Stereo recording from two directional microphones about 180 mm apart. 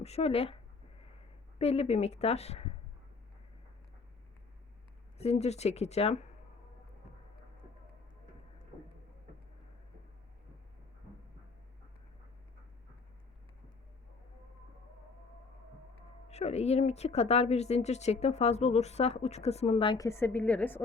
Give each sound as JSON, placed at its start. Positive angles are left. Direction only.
{"t": 0.0, "sound": "speech", "side_deg": 35}
{"t": 5.1, "sound": "speech", "side_deg": 35}
{"t": 16.3, "sound": "speech", "side_deg": 35}